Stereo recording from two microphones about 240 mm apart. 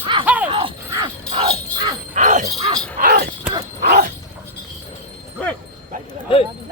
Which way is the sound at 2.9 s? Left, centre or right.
Right.